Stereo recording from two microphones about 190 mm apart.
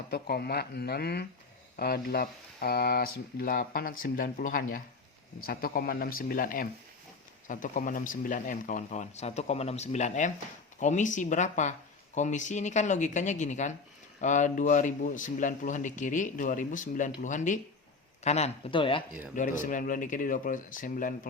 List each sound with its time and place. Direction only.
0.1 s speech: 55° left (ahead or behind); by 19.0 s 25° left (ahead or behind)
19.4 s speech: 45° left (ahead or behind)